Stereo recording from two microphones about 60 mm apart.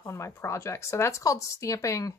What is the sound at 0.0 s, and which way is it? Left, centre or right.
Speech, left.